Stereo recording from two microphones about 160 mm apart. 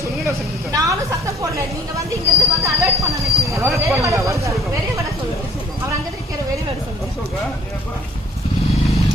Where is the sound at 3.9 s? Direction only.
20° right (ahead or behind).